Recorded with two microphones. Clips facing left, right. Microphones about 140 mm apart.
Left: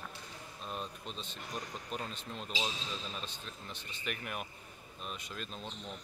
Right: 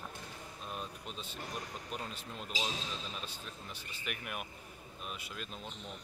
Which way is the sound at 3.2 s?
10° right (ahead or behind).